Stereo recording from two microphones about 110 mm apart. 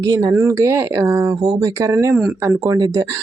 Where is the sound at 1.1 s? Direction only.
35° right (ahead or behind).